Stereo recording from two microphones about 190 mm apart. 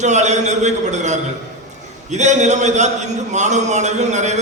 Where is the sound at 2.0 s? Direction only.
40° right (ahead or behind).